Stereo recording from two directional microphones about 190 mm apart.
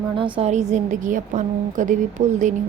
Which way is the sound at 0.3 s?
35° right (ahead or behind).